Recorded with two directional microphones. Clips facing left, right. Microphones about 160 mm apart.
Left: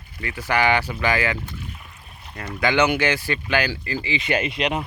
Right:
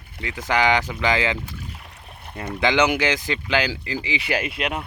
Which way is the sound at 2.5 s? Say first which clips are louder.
Even; 20° right (ahead or behind).